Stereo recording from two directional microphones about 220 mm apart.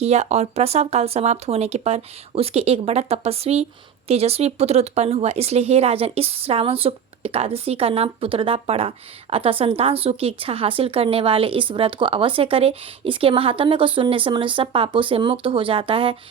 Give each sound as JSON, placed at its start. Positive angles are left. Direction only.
{"t": 0.0, "sound": "speech", "side_deg": -30}